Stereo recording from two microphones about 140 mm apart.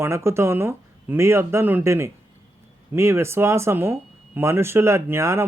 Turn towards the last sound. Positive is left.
turn(degrees=-20)  # may be behind; listen again after turning